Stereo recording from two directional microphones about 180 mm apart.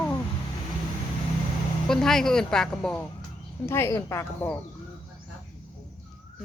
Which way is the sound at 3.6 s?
15° left (ahead or behind).